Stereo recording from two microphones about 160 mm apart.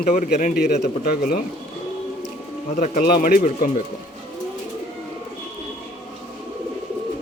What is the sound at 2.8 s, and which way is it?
Speech, 60° left (ahead or behind).